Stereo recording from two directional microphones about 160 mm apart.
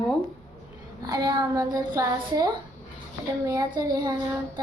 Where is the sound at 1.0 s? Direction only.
25° right (ahead or behind).